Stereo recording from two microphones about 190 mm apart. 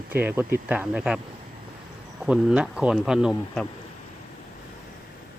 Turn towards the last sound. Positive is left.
turn(degrees=-5)  # may be behind; listen again after turning